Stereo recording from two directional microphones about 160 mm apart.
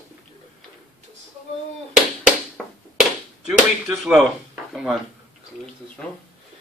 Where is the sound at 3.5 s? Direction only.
5° right (ahead or behind).